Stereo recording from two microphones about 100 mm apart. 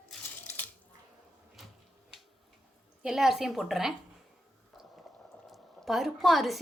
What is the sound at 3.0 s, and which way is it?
Speech, 5° right (ahead or behind).